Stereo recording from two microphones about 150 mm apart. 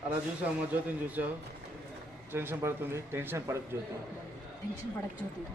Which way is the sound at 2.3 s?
15° right (ahead or behind).